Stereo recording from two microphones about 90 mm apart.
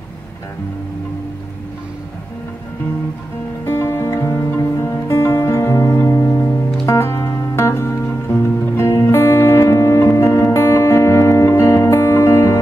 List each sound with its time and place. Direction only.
3.6 s music: 25° left (ahead or behind)